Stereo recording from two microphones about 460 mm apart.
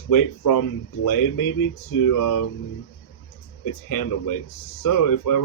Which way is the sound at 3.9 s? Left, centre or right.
Left.